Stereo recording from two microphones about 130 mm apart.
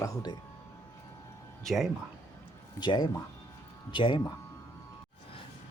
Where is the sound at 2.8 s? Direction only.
35° left (ahead or behind).